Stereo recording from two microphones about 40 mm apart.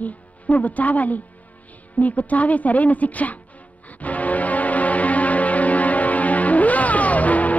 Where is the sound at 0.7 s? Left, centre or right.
Left.